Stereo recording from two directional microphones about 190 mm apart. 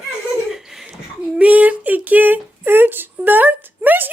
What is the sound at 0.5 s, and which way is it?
Laughter, centre (ahead or behind).